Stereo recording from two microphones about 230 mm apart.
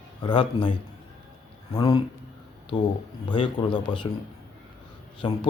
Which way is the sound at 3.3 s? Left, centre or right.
Left.